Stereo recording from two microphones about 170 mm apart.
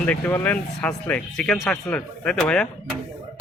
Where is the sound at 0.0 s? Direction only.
10° left (ahead or behind).